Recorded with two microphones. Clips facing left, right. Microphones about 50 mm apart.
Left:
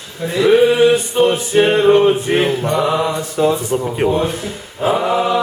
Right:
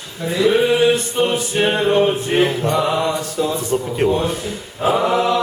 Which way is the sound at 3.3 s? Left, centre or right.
Left.